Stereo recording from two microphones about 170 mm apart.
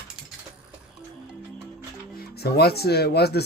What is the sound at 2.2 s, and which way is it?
Speech, 70° left (ahead or behind).